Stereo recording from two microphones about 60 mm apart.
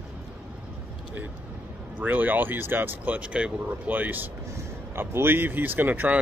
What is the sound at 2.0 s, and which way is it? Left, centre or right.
Speech, right.